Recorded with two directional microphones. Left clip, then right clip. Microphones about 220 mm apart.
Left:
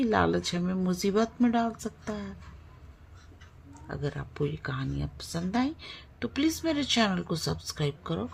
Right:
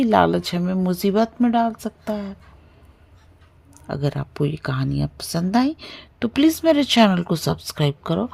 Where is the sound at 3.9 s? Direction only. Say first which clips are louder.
Right 9 dB; 40° right (ahead or behind).